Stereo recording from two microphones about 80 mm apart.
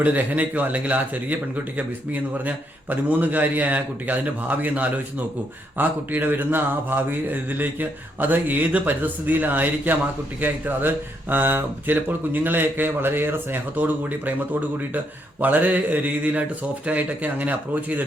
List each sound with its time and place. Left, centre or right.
0.0 s speech: right